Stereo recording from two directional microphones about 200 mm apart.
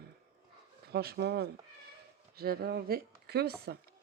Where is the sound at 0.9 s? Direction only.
55° right (ahead or behind).